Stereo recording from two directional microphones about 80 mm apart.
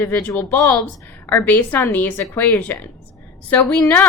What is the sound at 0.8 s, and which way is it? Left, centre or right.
A woman's voice, left.